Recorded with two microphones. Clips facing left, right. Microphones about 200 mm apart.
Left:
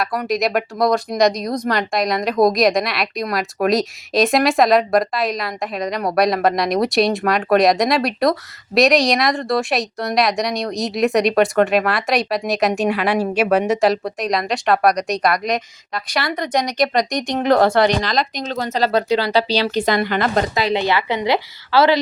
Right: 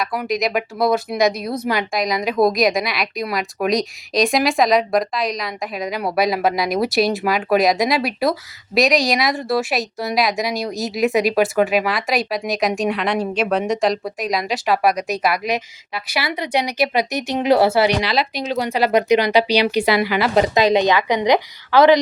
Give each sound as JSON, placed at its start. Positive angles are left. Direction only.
{"t": 0.0, "sound": "speech", "side_deg": 0}
{"t": 20.6, "sound": "speech", "side_deg": -20}